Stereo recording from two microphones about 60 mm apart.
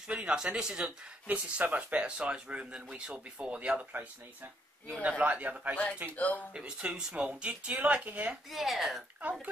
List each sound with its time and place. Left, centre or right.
0.1 s speech: centre
5.0 s speech: right
6.1 s speech: left
6.5 s speech: centre
8.5 s speech: centre